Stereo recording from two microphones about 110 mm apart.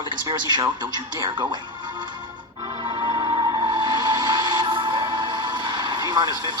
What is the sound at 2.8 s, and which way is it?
Music, 50° right (ahead or behind).